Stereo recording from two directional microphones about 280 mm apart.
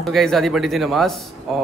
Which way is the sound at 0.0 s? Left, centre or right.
Centre.